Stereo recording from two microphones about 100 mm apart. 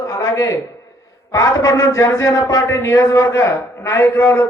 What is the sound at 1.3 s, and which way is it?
A man's voice, 35° left (ahead or behind).